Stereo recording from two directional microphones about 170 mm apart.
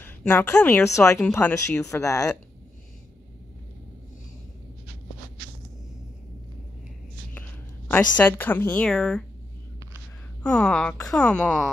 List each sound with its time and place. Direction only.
0.0 s a woman's voice: 10° left (ahead or behind)
7.9 s speech: 10° left (ahead or behind)
10.4 s speech: 5° left (ahead or behind)